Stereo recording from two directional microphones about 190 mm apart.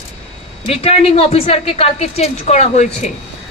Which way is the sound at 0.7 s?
30° left (ahead or behind).